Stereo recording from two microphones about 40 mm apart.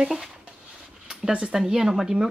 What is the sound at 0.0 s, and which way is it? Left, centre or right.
Speech, centre.